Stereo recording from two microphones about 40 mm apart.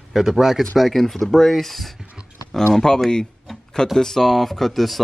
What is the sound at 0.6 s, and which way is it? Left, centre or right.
Speech, centre.